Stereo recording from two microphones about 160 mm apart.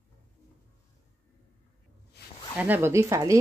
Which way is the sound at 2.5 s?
10° right (ahead or behind).